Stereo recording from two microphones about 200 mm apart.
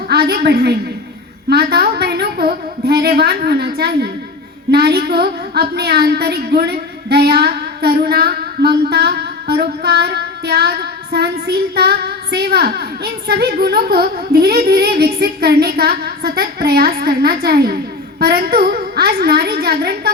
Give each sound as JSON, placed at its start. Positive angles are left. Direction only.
{"t": 0.1, "sound": "a woman's voice", "side_deg": -55}